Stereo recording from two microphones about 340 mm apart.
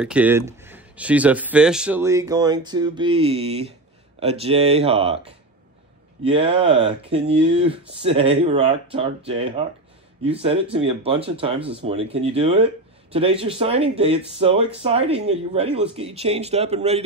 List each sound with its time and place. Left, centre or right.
0.0 s speech: centre
6.2 s speech: centre